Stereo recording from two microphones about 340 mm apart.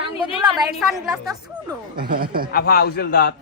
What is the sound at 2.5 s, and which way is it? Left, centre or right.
Speech, left.